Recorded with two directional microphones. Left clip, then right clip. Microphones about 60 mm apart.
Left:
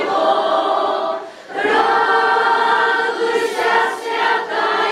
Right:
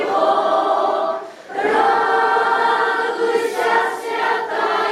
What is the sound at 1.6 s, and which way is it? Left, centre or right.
Choir, centre.